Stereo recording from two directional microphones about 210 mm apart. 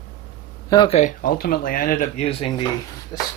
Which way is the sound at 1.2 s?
45° left (ahead or behind).